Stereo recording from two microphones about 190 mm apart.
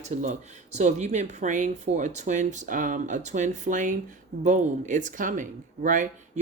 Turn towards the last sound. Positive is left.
turn(degrees=-40)  # may be behind; listen again after turning